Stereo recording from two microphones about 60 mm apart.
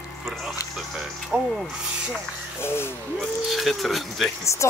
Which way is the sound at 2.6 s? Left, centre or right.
Left.